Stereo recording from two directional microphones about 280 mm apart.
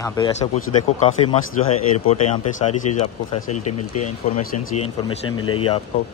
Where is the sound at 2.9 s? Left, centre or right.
Left.